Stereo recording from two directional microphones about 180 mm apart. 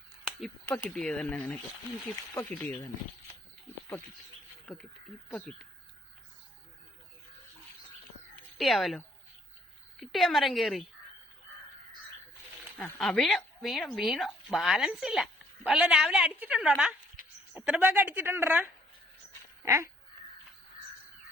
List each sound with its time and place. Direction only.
0.7 s speech: 10° left (ahead or behind)
4.6 s speech: 5° left (ahead or behind)
8.5 s speech: centre (ahead or behind)
10.0 s speech: centre (ahead or behind)
12.7 s speech: 5° left (ahead or behind); by 19.9 s 15° right (ahead or behind)